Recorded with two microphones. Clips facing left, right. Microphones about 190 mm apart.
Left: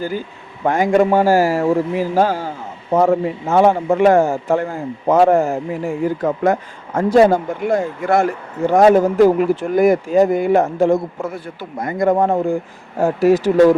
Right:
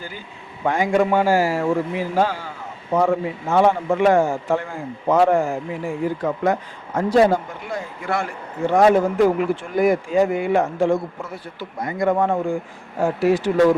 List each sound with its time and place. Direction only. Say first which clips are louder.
0.6 s a man's voice: left 4 dB; 45° left (ahead or behind)